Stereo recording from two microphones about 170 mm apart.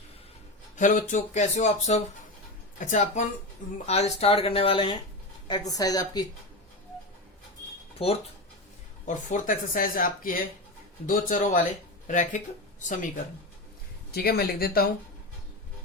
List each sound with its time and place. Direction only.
0.8 s a woman's voice: 50° left (ahead or behind); by 6.2 s 20° left (ahead or behind)
7.9 s speech: 35° left (ahead or behind)
9.0 s speech: 50° left (ahead or behind)
14.1 s speech: 65° left (ahead or behind)